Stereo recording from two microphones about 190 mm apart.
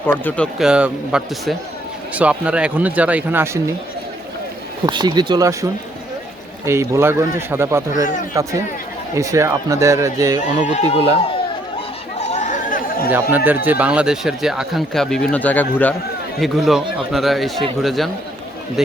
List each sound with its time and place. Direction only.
0.1 s speech: 10° left (ahead or behind)
0.6 s speech: 5° right (ahead or behind)
4.9 s speech: 25° right (ahead or behind)
6.7 s speech: 15° right (ahead or behind)
10.7 s speech: 35° left (ahead or behind)
12.1 s chatter: 35° left (ahead or behind)
13.3 s speech: 10° right (ahead or behind)